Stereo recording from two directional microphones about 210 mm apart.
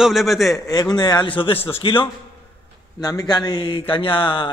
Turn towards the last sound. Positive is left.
turn(degrees=25)  # may be behind; listen again after turning